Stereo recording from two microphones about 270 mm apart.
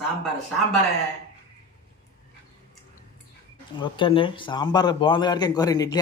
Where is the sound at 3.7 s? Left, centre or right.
Centre.